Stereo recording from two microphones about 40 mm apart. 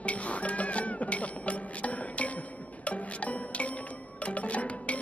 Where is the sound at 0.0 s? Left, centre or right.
Left.